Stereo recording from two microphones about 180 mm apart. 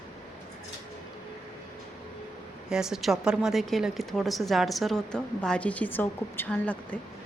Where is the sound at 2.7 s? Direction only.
5° right (ahead or behind).